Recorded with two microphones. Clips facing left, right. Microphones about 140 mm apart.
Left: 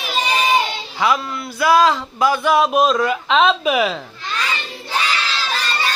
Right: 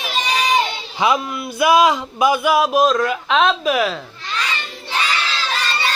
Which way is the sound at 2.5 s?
Centre (ahead or behind).